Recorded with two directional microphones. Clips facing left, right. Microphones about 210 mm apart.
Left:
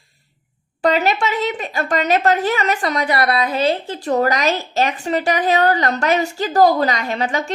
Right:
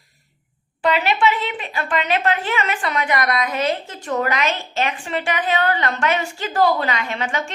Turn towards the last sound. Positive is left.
turn(degrees=35)  # may be behind; listen again after turning